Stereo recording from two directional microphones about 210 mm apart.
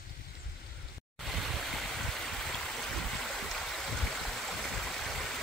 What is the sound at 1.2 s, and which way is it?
Stream, centre (ahead or behind).